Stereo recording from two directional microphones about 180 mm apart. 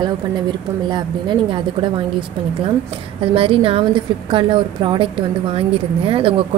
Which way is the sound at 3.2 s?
30° right (ahead or behind).